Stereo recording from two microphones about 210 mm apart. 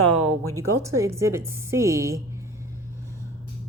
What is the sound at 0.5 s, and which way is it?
Speech, 15° right (ahead or behind).